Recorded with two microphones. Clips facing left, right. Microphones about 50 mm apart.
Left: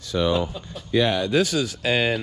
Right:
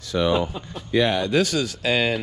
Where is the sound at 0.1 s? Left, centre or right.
Right.